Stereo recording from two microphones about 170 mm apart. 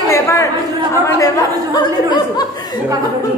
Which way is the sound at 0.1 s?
20° left (ahead or behind).